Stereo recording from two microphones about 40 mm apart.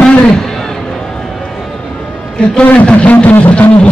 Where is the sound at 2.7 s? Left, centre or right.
Left.